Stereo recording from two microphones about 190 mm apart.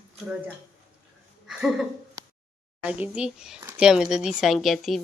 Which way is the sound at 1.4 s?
Centre (ahead or behind).